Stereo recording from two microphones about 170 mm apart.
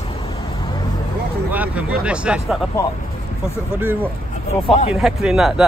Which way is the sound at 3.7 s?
10° right (ahead or behind).